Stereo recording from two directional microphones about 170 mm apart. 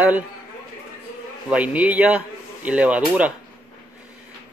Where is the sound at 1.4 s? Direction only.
10° right (ahead or behind).